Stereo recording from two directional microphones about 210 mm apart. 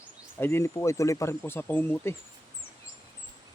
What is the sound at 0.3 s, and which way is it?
Speech, 10° left (ahead or behind).